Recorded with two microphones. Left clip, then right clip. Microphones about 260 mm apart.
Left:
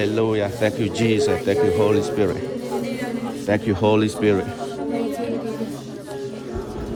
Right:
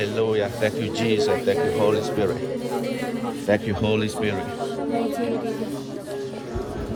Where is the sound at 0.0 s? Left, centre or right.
Centre.